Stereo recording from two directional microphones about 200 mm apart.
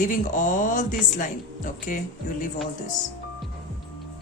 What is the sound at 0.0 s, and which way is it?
Speech, 40° left (ahead or behind).